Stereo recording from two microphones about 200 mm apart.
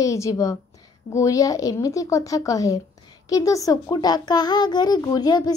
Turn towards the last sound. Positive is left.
turn(degrees=20)  # may be behind; listen again after turning